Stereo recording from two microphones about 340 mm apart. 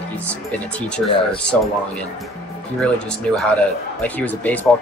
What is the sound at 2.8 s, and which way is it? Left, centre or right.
A man's voice, centre.